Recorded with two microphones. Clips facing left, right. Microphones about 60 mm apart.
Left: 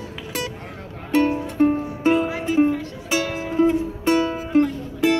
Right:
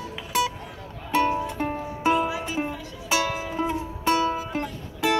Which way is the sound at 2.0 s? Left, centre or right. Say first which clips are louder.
Left 3 dB; left.